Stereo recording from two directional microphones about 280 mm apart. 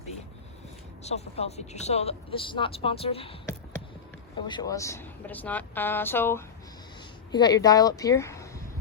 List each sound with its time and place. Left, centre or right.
1.0 s speech: left